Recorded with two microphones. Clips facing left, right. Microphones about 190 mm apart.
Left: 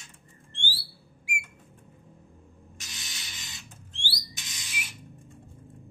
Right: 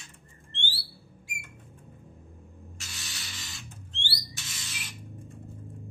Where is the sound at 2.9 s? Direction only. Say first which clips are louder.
Right 2 dB; 20° left (ahead or behind).